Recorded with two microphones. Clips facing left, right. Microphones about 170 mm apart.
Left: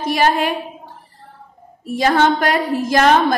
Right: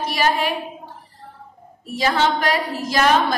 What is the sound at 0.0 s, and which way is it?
Speech, 50° left (ahead or behind).